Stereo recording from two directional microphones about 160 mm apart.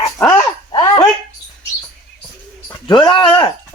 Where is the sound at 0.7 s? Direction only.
25° left (ahead or behind).